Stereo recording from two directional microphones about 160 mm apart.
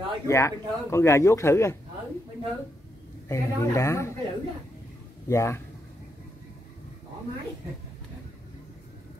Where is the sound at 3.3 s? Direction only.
20° left (ahead or behind).